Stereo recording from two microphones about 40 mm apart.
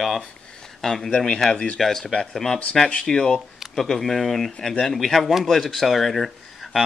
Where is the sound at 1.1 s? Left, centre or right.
Left.